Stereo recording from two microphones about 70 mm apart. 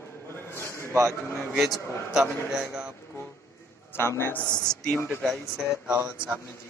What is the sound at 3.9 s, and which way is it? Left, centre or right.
Speech, left.